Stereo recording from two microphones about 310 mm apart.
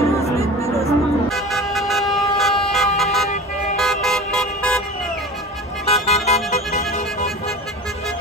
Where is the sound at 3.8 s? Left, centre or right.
Centre.